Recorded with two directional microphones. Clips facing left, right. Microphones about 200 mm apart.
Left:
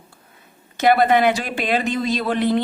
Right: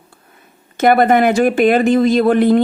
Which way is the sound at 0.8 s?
50° right (ahead or behind).